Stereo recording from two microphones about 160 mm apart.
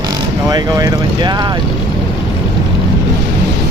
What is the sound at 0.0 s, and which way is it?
Speech, 25° right (ahead or behind).